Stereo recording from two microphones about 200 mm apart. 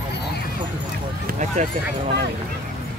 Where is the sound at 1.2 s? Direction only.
40° right (ahead or behind).